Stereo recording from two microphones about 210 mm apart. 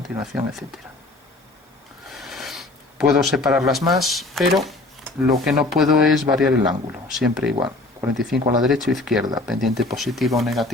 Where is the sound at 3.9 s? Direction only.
Centre (ahead or behind).